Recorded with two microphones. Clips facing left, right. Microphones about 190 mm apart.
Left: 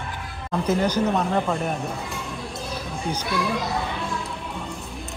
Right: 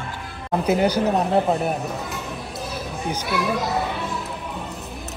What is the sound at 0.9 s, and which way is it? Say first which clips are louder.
Speech: right 3 dB; 35° right (ahead or behind).